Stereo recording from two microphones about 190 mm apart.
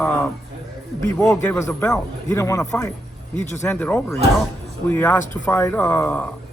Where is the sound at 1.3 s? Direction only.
10° left (ahead or behind).